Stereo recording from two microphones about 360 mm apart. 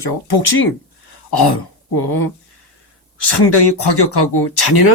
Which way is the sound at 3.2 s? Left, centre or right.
Left.